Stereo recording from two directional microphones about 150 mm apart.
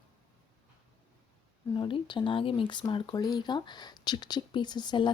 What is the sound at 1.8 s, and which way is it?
A woman's voice, 35° left (ahead or behind).